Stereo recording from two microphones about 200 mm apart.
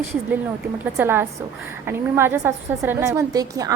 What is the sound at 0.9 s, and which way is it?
A woman's voice, 10° right (ahead or behind).